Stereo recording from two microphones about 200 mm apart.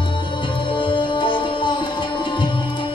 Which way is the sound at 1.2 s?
25° left (ahead or behind).